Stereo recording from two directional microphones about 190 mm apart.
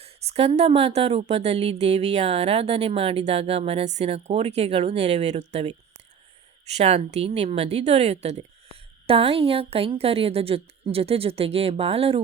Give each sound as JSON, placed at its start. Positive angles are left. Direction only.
{"t": 0.0, "sound": "a woman's voice", "side_deg": -30}
{"t": 6.7, "sound": "a woman's voice", "side_deg": -35}